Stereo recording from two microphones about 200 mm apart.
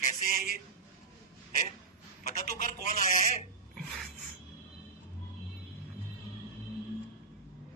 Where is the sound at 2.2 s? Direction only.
40° left (ahead or behind).